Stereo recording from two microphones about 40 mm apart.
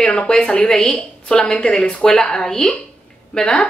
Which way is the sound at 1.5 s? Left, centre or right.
Left.